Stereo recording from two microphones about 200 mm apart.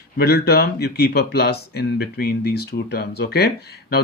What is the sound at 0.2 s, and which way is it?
Speech, 50° left (ahead or behind).